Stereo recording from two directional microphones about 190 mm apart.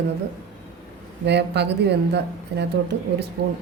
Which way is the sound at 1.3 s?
60° right (ahead or behind).